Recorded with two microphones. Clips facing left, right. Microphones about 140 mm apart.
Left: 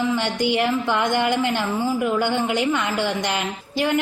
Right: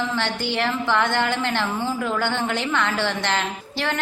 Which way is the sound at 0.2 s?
15° left (ahead or behind).